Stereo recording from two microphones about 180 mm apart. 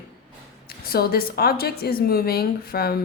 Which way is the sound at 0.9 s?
55° left (ahead or behind).